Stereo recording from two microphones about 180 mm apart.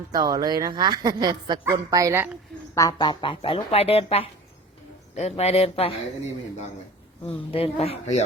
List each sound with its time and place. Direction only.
0.1 s a woman's voice: 20° right (ahead or behind)
2.7 s speech: 20° left (ahead or behind)
7.5 s speech: 35° left (ahead or behind)